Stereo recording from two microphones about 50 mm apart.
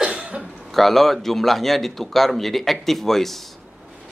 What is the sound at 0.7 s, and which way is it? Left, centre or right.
A man's voice, centre.